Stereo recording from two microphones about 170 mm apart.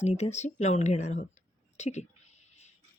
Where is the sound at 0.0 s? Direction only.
40° left (ahead or behind).